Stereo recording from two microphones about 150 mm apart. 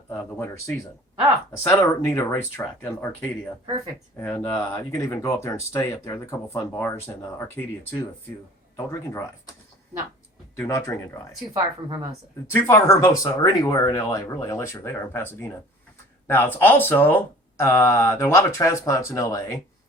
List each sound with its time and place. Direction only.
0.1 s speech: 15° left (ahead or behind)
10.6 s speech: 20° left (ahead or behind)
12.5 s speech: 20° left (ahead or behind)